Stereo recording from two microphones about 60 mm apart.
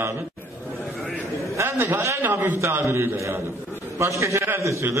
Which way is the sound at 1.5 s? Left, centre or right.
Right.